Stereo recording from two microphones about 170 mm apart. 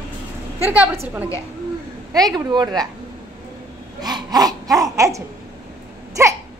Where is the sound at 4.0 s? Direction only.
25° right (ahead or behind).